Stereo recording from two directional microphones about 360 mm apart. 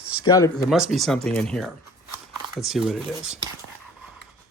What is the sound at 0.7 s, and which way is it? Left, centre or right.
Speech, centre.